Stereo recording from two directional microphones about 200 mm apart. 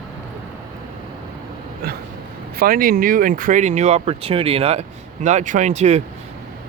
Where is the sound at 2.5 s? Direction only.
45° right (ahead or behind).